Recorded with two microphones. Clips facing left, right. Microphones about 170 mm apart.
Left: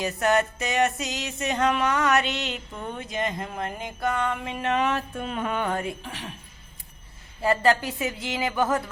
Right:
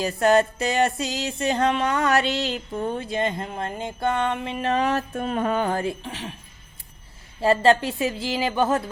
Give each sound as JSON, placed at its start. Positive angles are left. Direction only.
{"t": 0.0, "sound": "music", "side_deg": -30}
{"t": 7.4, "sound": "a woman's voice", "side_deg": -30}